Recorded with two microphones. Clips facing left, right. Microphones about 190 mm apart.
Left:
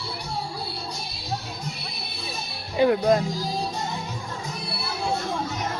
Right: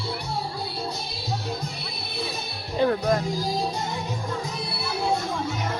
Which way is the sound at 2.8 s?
15° left (ahead or behind).